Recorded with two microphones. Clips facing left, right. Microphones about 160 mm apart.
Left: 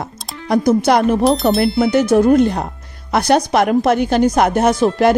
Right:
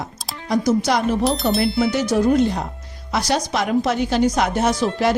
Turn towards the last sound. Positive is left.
turn(degrees=55)  # may be behind; listen again after turning